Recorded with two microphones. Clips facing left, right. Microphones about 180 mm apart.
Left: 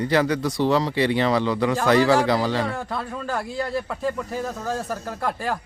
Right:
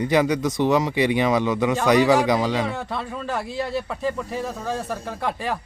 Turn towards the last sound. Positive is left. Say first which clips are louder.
# even
turn(degrees=0)  # may be behind; listen again after turning